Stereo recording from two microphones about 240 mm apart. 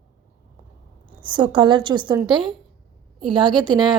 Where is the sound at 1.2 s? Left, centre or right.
Centre.